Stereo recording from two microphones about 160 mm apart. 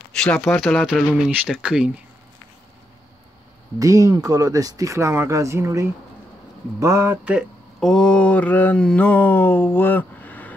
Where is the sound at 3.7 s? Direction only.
20° right (ahead or behind).